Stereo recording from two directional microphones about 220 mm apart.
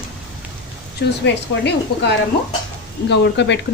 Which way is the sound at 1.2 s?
50° left (ahead or behind).